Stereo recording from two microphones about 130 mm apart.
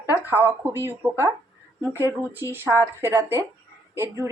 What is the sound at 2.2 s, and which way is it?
A woman's voice, 15° right (ahead or behind).